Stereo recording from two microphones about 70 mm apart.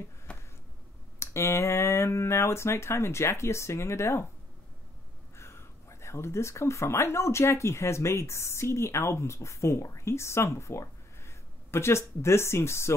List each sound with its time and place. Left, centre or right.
0.3 s a sound: centre
1.2 s speech: left
5.3 s speech: left